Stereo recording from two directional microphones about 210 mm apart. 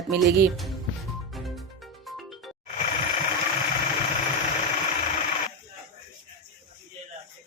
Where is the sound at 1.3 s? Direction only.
Centre (ahead or behind).